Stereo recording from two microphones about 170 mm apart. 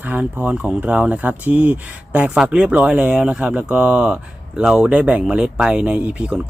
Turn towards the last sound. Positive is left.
turn(degrees=-5)  # may be behind; listen again after turning